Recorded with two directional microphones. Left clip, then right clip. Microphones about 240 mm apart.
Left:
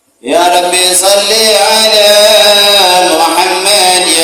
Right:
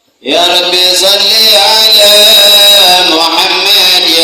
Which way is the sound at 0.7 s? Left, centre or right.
Left.